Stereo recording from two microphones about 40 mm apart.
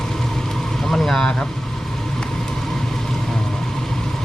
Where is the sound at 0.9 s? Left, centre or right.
Centre.